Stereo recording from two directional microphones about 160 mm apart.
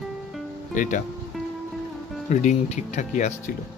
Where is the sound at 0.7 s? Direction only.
55° left (ahead or behind).